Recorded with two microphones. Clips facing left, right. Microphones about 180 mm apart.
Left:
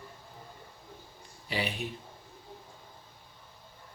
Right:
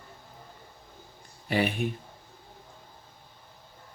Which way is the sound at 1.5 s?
50° right (ahead or behind).